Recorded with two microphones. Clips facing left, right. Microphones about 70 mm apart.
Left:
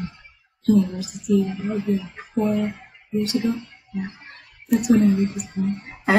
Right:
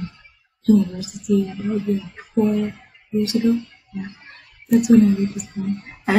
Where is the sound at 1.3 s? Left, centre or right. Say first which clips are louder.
Right 1 dB; left.